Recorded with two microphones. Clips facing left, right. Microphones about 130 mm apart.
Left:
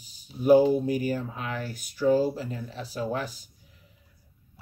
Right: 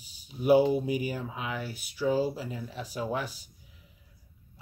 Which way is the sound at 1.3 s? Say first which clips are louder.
Left 1 dB; 10° right (ahead or behind).